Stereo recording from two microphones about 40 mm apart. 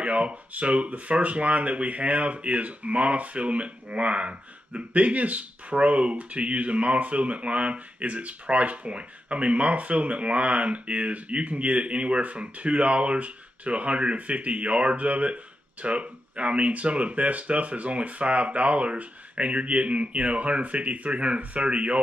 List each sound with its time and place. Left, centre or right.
0.0 s speech: right